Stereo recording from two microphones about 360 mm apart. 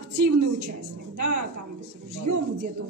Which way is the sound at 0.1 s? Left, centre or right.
Right.